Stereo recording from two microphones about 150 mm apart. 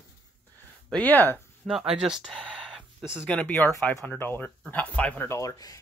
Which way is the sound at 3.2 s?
10° left (ahead or behind).